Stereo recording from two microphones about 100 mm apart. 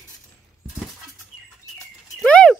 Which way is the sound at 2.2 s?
10° left (ahead or behind).